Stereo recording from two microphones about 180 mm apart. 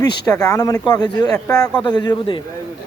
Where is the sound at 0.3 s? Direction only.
20° left (ahead or behind).